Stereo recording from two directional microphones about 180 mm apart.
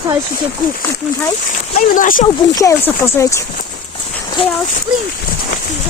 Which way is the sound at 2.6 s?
15° left (ahead or behind).